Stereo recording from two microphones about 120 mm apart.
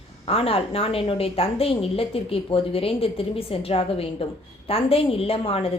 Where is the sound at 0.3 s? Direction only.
50° left (ahead or behind).